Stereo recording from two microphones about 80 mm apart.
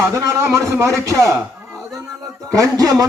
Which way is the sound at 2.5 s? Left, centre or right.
Right.